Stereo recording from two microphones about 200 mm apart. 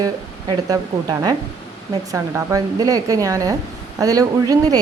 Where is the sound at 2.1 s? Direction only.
15° right (ahead or behind).